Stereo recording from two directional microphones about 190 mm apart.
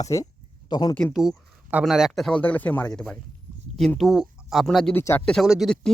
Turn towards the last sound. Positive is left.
turn(degrees=0)  # may be behind; listen again after turning